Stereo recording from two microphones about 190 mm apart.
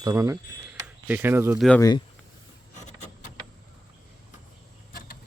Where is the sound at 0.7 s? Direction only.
10° right (ahead or behind).